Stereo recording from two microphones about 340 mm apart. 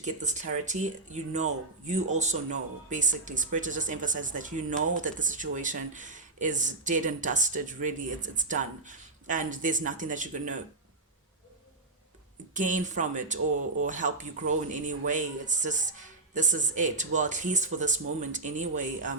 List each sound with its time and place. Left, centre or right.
0.0 s speech: right
12.5 s speech: right